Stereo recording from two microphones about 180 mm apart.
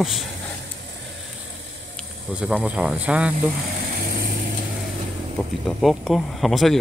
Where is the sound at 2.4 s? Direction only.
5° right (ahead or behind).